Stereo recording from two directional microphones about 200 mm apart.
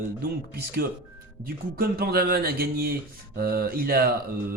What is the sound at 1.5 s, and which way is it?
Speech, 45° right (ahead or behind).